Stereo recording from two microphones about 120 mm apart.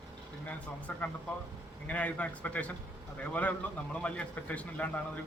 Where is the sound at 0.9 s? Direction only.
10° left (ahead or behind).